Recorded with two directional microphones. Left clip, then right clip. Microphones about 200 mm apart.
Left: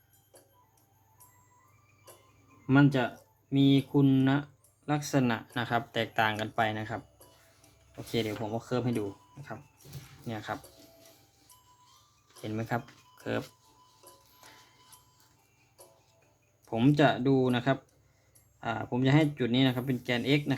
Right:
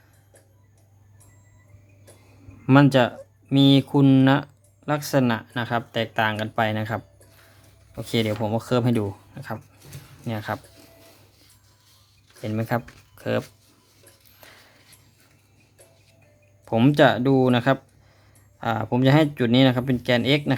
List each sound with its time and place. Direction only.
2.6 s speech: 40° right (ahead or behind)
4.9 s speech: 25° right (ahead or behind)
8.1 s speech: 30° right (ahead or behind)
10.2 s speech: 25° right (ahead or behind)
12.4 s speech: 20° right (ahead or behind)
13.1 s music: 20° right (ahead or behind)
14.4 s a sound: 20° right (ahead or behind)
16.6 s speech: 25° right (ahead or behind)